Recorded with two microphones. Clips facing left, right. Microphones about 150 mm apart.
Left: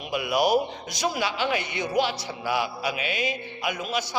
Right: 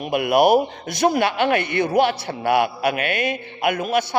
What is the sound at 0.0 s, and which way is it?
Speech, 55° right (ahead or behind).